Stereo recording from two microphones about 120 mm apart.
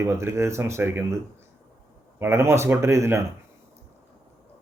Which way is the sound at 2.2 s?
20° right (ahead or behind).